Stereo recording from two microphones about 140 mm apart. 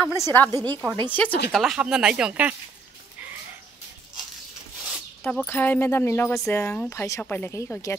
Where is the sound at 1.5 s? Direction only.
5° right (ahead or behind).